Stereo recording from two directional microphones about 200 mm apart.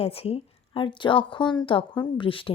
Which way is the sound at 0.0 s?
30° left (ahead or behind).